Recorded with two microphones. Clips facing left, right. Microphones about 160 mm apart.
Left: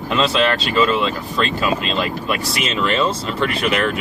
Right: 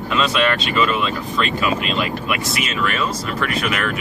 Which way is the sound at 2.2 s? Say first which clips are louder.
Left 1 dB; 35° left (ahead or behind).